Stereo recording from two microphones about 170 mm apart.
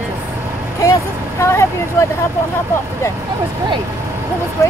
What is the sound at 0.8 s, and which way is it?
Speech, 15° left (ahead or behind).